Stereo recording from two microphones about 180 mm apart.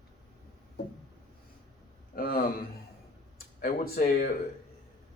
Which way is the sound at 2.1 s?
55° left (ahead or behind).